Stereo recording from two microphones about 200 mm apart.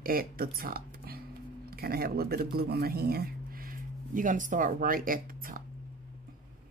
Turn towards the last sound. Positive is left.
turn(degrees=-45)  # may be behind; listen again after turning